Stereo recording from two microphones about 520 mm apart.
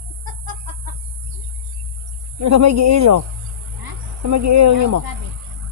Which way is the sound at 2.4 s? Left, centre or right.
Right.